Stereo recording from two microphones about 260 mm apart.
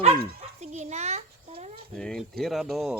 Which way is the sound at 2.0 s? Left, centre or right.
Centre.